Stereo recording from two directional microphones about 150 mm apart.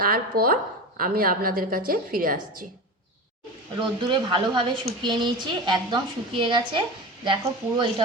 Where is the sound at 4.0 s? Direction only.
30° right (ahead or behind).